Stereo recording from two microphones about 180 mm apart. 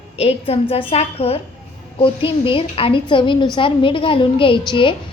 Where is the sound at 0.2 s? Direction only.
35° left (ahead or behind).